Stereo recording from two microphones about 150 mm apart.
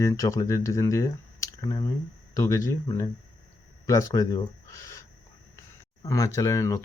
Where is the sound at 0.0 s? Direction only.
20° left (ahead or behind).